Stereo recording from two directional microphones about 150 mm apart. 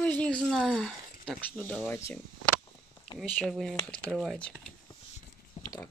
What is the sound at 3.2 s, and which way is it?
Speech, 10° left (ahead or behind).